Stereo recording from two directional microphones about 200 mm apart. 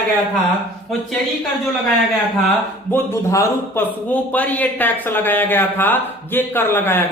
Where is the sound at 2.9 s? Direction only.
15° left (ahead or behind).